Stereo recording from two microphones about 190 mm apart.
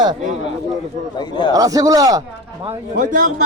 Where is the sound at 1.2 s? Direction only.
25° left (ahead or behind).